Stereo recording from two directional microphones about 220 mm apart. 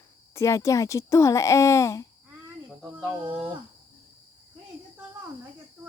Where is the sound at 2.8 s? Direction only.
10° right (ahead or behind).